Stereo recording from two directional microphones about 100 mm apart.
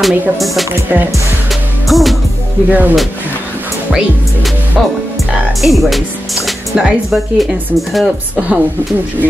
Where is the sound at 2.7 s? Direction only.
20° right (ahead or behind).